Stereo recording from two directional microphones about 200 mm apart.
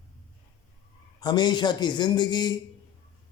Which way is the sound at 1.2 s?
20° left (ahead or behind).